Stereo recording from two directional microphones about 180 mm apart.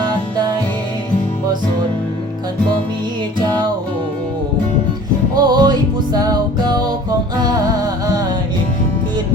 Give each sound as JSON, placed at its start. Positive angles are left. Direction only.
{"t": 5.4, "sound": "music", "side_deg": -25}